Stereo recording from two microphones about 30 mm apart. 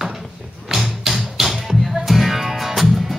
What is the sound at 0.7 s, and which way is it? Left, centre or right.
Music, centre.